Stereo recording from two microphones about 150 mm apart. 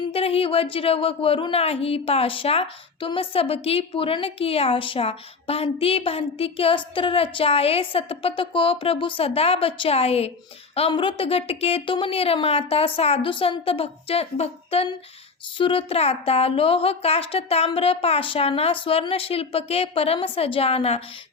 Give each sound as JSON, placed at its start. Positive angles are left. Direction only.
{"t": 0.1, "sound": "a woman's voice", "side_deg": 40}